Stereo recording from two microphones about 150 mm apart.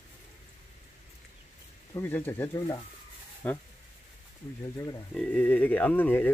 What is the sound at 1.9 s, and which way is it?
Speech, 15° left (ahead or behind).